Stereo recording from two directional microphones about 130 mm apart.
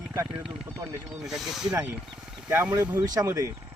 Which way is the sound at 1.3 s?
Centre (ahead or behind).